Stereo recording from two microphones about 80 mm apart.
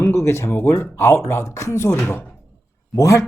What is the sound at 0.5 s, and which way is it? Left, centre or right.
Speech, left.